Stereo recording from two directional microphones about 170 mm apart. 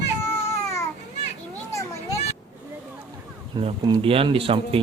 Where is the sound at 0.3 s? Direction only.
15° left (ahead or behind).